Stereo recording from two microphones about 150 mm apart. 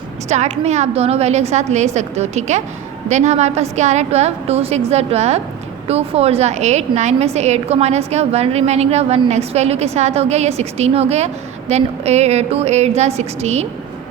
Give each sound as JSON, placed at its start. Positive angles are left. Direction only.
{"t": 0.3, "sound": "a woman's voice", "side_deg": -50}